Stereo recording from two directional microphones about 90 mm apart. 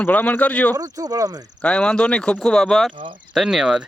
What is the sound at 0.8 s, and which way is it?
Speech, 40° right (ahead or behind).